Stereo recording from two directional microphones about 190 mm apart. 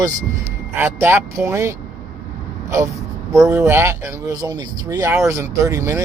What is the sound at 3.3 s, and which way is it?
Speech, 15° right (ahead or behind).